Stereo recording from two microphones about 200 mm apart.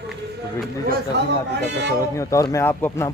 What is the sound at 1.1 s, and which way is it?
Speech, 60° right (ahead or behind).